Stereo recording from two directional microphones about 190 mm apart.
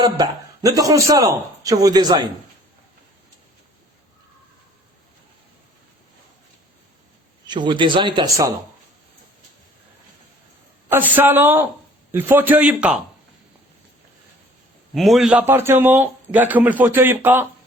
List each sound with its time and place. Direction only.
0.0 s a man's voice: 20° right (ahead or behind)
7.4 s a man's voice: 25° right (ahead or behind)
10.8 s a man's voice: 10° right (ahead or behind)
14.9 s a man's voice: centre (ahead or behind)